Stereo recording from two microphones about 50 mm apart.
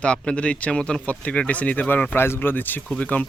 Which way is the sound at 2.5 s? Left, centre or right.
Left.